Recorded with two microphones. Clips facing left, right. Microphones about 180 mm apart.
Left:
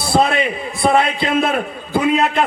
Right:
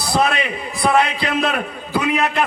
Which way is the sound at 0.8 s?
25° left (ahead or behind).